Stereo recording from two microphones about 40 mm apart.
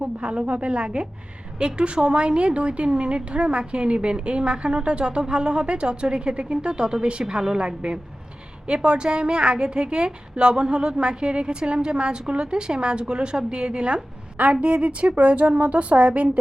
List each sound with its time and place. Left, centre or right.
0.0 s a woman's voice: right